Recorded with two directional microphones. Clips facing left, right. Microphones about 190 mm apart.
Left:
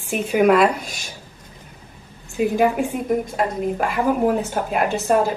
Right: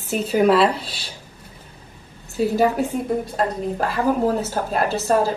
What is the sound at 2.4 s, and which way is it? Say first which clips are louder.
A woman's voice: even; 15° left (ahead or behind).